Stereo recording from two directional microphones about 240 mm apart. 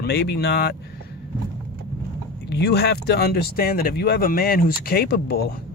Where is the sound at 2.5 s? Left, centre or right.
Left.